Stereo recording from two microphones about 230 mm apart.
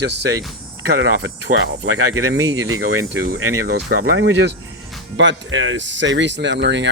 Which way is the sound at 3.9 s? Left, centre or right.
Right.